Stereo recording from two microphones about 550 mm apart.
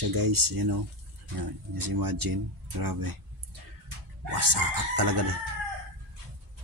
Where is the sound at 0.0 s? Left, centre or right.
Right.